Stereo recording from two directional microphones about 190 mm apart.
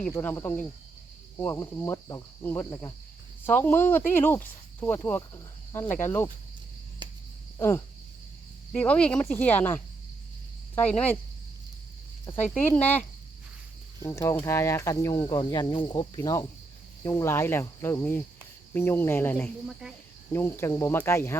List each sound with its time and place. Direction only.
0.1 s speech: 15° left (ahead or behind)
7.0 s cricket: 25° right (ahead or behind)
8.7 s speech: 5° left (ahead or behind)
12.2 s speech: 10° left (ahead or behind)
14.0 s speech: 15° left (ahead or behind)